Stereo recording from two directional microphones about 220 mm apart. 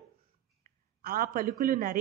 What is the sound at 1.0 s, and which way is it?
Speech, 40° right (ahead or behind).